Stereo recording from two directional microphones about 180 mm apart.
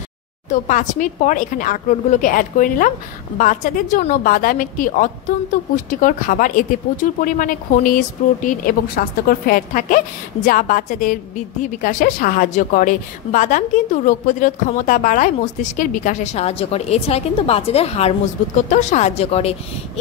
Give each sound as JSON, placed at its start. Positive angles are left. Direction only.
{"t": 0.5, "sound": "a woman's voice", "side_deg": 45}